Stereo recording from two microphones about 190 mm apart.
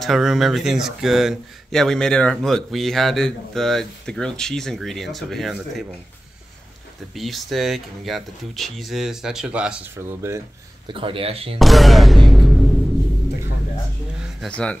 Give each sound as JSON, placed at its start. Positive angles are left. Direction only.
{"t": 0.0, "sound": "speech", "side_deg": 0}
{"t": 7.2, "sound": "speech", "side_deg": 0}
{"t": 10.9, "sound": "speech", "side_deg": -30}
{"t": 11.5, "sound": "speech", "side_deg": 0}
{"t": 14.2, "sound": "speech", "side_deg": 0}